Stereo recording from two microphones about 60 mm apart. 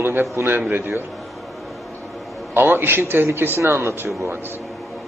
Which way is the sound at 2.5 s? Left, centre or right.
Right.